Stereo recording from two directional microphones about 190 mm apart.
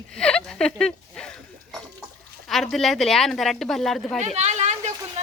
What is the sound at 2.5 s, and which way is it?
A woman's voice, centre (ahead or behind).